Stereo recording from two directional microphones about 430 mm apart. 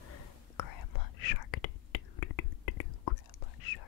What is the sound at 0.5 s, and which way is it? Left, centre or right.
Whispering, left.